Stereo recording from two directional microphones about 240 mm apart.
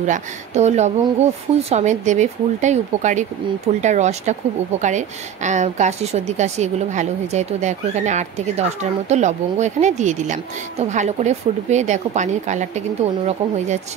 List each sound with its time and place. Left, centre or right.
0.0 s speech: right